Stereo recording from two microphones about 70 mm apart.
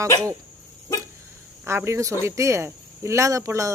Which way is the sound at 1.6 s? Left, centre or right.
Right.